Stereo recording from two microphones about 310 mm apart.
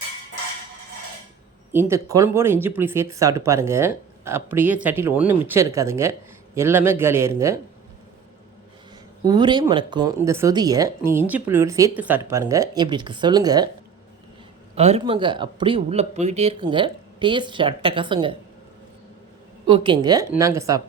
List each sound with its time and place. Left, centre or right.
1.7 s speech: centre
9.2 s speech: centre
14.8 s speech: centre
19.6 s speech: centre